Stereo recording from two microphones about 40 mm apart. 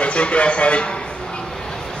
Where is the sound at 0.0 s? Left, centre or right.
Left.